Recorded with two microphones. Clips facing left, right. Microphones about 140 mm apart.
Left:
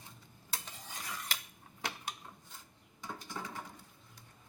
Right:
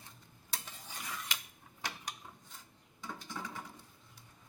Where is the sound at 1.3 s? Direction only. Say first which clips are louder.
Even; 35° left (ahead or behind).